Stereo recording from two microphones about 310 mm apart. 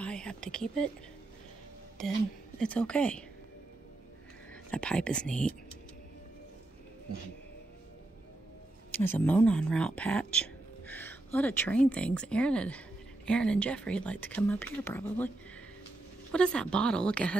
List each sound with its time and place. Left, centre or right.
0.0 s speech: centre
2.6 s speech: centre
4.6 s speech: centre
8.9 s speech: centre